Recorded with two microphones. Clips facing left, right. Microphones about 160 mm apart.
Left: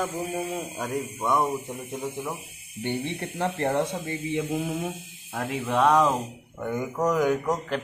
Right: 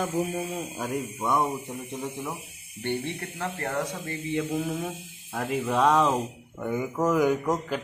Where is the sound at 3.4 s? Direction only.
30° left (ahead or behind).